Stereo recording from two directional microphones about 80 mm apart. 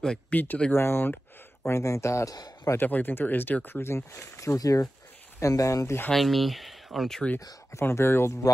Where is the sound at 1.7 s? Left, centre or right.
Left.